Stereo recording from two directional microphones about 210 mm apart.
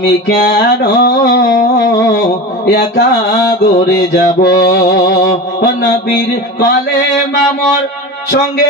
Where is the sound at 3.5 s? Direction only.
50° left (ahead or behind).